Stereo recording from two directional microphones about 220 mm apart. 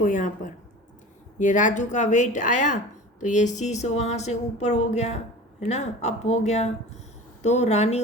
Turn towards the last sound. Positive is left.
turn(degrees=30)  # may be behind; listen again after turning